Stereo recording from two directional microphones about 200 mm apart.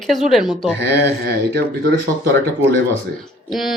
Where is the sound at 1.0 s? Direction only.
55° right (ahead or behind).